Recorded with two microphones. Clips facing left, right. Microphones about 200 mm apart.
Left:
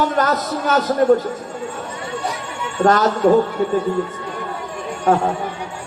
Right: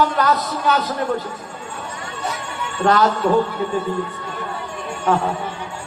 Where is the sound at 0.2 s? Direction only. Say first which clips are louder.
Left 1 dB; 45° left (ahead or behind).